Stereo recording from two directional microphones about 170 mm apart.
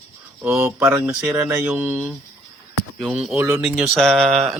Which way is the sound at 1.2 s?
5° right (ahead or behind).